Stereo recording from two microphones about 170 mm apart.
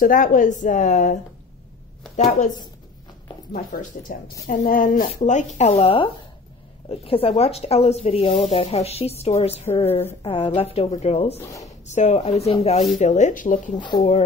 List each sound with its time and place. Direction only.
0.0 s speech: 55° left (ahead or behind)
3.5 s speech: 50° left (ahead or behind)
13.7 s speech: 25° left (ahead or behind)